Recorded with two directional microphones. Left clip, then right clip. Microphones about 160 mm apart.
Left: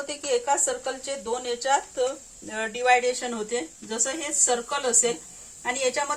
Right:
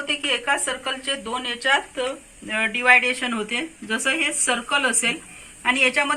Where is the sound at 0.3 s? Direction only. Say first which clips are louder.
Even; 50° left (ahead or behind).